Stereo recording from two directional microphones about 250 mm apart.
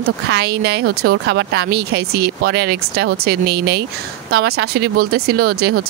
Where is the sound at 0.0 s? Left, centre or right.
Right.